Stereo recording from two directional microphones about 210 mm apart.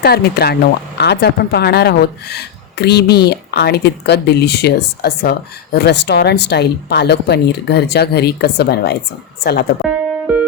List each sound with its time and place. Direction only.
0.0 s speech: 50° left (ahead or behind)
10.3 s music: 5° right (ahead or behind)